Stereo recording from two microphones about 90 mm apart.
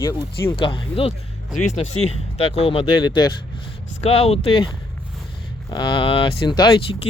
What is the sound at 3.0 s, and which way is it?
Speech, 55° left (ahead or behind).